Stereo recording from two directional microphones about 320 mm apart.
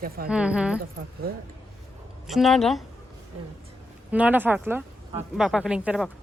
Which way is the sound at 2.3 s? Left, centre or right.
Centre.